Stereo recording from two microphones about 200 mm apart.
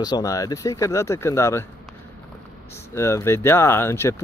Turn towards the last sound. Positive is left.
turn(degrees=10)  # may be behind; listen again after turning